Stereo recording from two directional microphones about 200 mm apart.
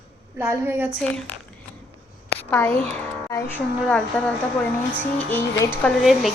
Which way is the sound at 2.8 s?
5° left (ahead or behind).